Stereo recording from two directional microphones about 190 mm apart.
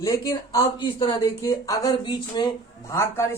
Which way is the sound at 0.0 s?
20° left (ahead or behind).